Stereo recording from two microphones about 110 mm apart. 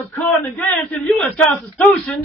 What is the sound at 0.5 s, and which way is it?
Speech, 15° left (ahead or behind).